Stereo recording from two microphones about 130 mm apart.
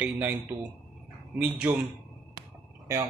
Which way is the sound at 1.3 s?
10° right (ahead or behind).